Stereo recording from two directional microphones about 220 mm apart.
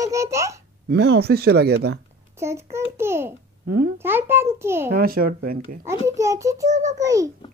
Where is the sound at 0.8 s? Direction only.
50° right (ahead or behind).